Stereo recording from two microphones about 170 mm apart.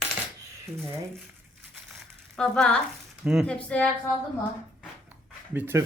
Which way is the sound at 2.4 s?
5° left (ahead or behind).